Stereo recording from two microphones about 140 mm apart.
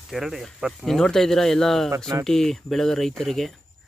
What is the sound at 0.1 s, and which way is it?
Speech, centre (ahead or behind).